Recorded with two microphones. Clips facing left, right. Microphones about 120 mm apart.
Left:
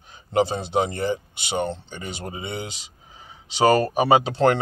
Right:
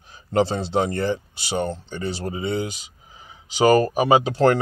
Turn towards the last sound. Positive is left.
turn(degrees=25)  # may be behind; listen again after turning